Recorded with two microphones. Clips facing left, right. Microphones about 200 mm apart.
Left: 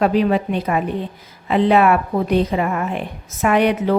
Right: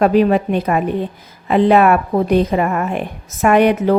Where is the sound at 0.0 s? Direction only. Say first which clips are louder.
Right 4 dB; 50° right (ahead or behind).